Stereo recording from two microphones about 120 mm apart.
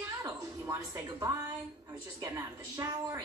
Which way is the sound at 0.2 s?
30° right (ahead or behind).